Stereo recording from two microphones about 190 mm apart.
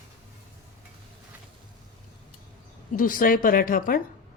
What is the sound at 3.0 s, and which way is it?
Speech, 45° left (ahead or behind).